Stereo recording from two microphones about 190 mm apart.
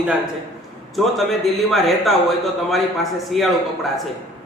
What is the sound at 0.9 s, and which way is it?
A man's voice, centre (ahead or behind).